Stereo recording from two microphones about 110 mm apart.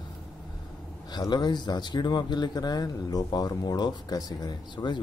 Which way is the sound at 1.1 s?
40° left (ahead or behind).